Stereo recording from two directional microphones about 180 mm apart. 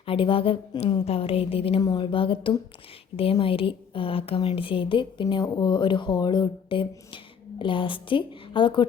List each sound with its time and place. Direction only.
0.0 s a woman's voice: 30° left (ahead or behind)